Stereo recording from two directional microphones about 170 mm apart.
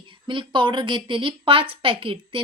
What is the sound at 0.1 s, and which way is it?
A woman's voice, 30° right (ahead or behind).